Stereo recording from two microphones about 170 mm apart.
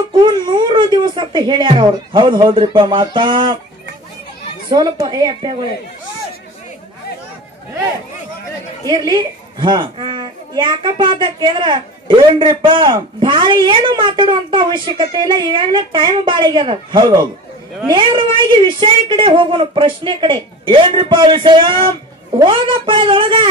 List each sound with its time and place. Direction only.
0.1 s baby cry: 25° right (ahead or behind)
1.5 s a child's voice: 25° right (ahead or behind)
4.6 s a child's voice: 25° right (ahead or behind)
8.8 s a child's voice: 25° right (ahead or behind)